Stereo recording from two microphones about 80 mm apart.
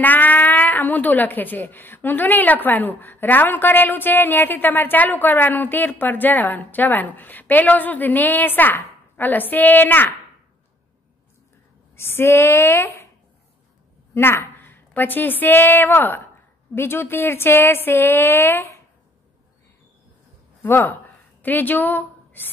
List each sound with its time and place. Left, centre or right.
0.0 s a woman's voice: left
11.9 s a woman's voice: left
14.1 s a woman's voice: left
20.6 s speech: left